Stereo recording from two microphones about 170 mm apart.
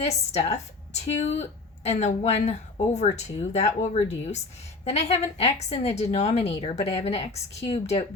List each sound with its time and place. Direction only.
0.0 s speech: 40° left (ahead or behind)